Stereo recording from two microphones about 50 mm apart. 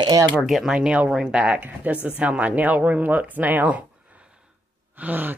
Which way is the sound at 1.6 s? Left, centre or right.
Right.